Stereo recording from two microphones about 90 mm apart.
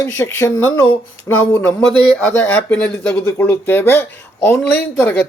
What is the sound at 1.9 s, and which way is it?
Speech, 60° right (ahead or behind).